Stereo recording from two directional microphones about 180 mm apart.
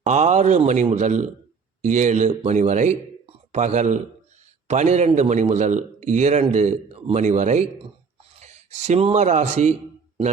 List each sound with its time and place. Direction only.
0.0 s a man's voice: 40° right (ahead or behind)